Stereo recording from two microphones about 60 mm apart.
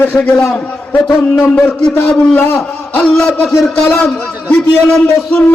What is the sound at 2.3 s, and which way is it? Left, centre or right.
Speech, left.